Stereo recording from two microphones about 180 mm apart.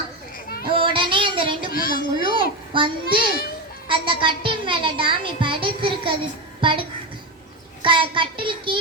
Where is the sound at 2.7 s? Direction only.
30° right (ahead or behind).